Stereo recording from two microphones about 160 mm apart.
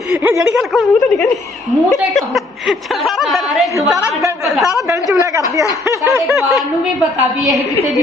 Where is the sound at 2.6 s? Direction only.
Centre (ahead or behind).